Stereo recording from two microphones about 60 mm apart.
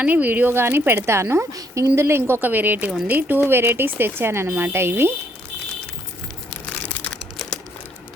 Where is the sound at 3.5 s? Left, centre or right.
Right.